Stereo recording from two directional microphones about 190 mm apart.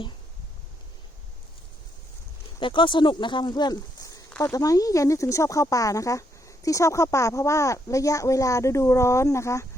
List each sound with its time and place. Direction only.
2.6 s speech: 25° left (ahead or behind)